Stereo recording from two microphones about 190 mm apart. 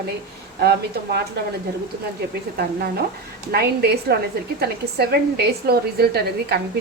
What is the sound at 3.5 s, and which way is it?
A woman's voice, 55° right (ahead or behind).